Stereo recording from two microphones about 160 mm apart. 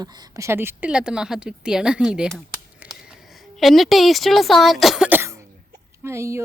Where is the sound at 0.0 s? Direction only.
25° right (ahead or behind); by 2.9 s 5° right (ahead or behind).